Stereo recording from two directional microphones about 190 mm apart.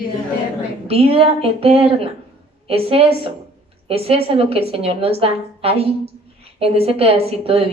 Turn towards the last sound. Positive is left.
turn(degrees=-30)  # may be behind; listen again after turning